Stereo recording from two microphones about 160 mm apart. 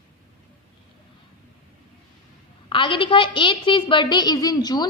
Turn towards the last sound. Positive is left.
turn(degrees=25)  # may be behind; listen again after turning